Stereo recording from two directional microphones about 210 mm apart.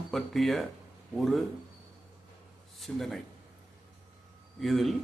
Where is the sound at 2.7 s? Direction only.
Centre (ahead or behind).